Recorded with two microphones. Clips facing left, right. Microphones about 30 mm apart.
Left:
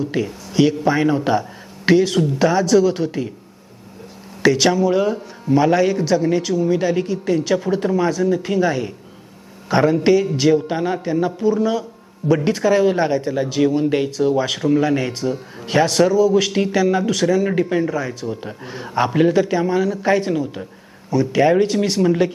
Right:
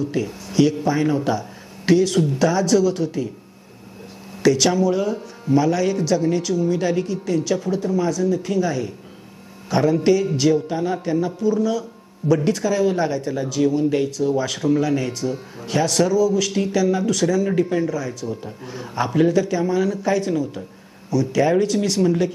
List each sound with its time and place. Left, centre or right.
0.1 s speech: left
4.4 s speech: left
10.3 s speech: centre
10.7 s speech: left